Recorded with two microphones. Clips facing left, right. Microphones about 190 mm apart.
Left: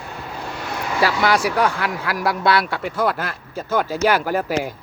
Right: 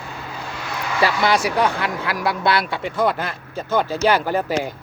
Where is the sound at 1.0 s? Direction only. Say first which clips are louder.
Even; 5° left (ahead or behind).